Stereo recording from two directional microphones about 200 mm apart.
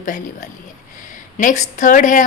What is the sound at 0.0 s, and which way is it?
A woman's voice, 40° left (ahead or behind).